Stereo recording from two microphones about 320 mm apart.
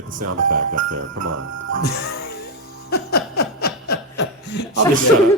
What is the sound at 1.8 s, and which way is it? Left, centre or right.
Music, left.